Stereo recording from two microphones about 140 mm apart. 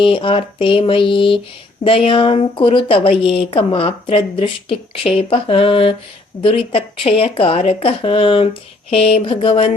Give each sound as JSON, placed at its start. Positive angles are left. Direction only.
{"t": 0.0, "sound": "speech", "side_deg": 40}